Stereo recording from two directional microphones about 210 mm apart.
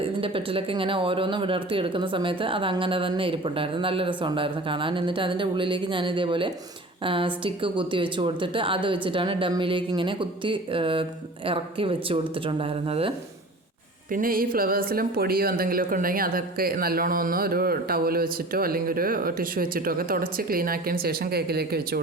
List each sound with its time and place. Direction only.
0.0 s speech: 25° right (ahead or behind)
14.1 s speech: 40° right (ahead or behind)